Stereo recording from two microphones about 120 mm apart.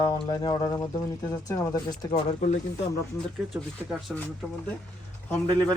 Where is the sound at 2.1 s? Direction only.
80° left.